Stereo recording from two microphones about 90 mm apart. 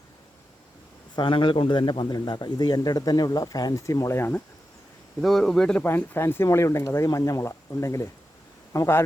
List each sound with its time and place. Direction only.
1.1 s a man's voice: 65° left (ahead or behind); by 4.3 s 35° left (ahead or behind)
5.2 s a man's voice: 5° left (ahead or behind)
5.8 s speech: 25° left (ahead or behind)